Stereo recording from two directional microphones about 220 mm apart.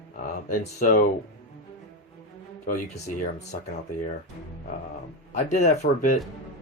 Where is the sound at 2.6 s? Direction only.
40° left (ahead or behind).